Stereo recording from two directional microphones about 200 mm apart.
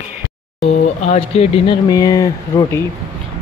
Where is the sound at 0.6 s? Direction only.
30° left (ahead or behind).